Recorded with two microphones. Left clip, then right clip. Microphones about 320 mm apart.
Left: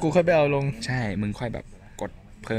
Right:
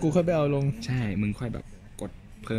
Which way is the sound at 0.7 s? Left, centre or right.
Centre.